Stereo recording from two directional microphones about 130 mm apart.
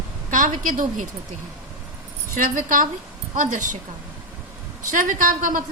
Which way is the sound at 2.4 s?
90° right.